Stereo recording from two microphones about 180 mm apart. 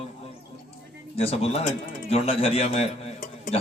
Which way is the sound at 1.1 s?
35° left (ahead or behind).